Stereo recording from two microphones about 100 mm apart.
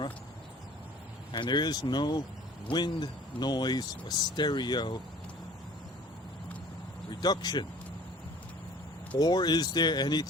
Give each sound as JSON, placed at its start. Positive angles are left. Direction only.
{"t": 1.3, "sound": "speech", "side_deg": 50}
{"t": 7.1, "sound": "speech", "side_deg": 45}
{"t": 9.1, "sound": "speech", "side_deg": 45}